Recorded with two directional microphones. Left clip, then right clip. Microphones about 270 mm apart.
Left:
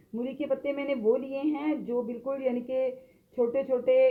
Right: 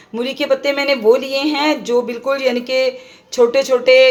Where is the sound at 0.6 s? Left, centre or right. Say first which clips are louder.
Right 14 dB; right.